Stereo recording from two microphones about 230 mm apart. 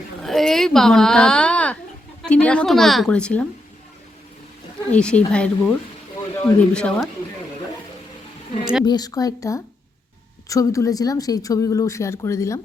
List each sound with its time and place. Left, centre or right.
0.2 s a woman's voice: centre
4.9 s a woman's voice: centre
8.8 s a woman's voice: centre